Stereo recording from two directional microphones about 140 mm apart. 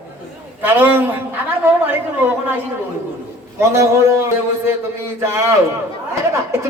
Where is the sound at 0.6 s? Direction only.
15° right (ahead or behind).